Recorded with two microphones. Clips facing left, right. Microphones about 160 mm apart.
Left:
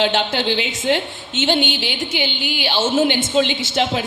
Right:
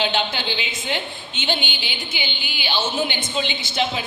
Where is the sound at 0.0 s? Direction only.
75° left (ahead or behind).